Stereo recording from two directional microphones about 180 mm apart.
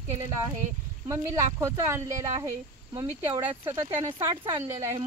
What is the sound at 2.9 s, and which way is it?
Speech, 25° right (ahead or behind).